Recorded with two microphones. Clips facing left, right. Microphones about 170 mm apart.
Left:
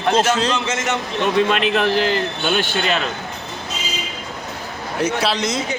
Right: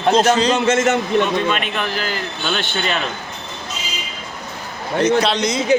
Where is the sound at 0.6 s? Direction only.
50° right (ahead or behind).